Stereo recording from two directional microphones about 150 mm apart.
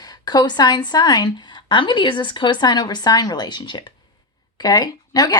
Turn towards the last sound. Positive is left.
turn(degrees=25)  # may be behind; listen again after turning